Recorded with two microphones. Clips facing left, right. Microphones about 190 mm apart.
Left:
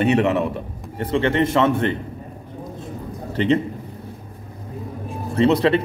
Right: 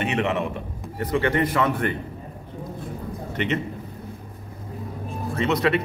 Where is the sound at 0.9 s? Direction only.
25° left (ahead or behind).